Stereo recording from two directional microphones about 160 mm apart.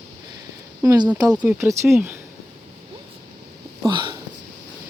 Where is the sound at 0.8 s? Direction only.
20° right (ahead or behind).